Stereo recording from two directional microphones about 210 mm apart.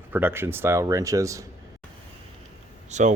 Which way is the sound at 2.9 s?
35° right (ahead or behind).